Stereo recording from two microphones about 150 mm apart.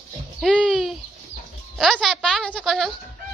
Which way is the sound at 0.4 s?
Centre (ahead or behind).